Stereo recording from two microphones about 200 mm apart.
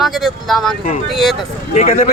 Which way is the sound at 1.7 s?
35° left (ahead or behind).